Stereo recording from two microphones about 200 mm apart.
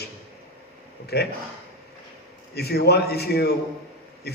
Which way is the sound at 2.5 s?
55° left (ahead or behind).